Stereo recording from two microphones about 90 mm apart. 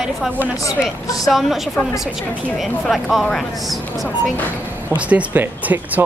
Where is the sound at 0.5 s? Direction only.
40° left (ahead or behind).